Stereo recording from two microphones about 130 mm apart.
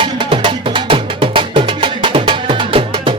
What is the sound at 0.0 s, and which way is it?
Music, 40° right (ahead or behind).